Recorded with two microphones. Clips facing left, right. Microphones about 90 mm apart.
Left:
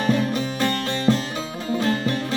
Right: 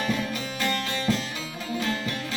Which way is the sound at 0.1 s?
40° left (ahead or behind).